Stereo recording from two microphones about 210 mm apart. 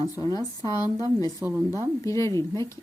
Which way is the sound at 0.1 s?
15° left (ahead or behind).